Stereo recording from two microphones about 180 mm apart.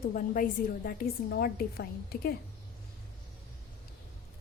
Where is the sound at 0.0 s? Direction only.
50° left (ahead or behind).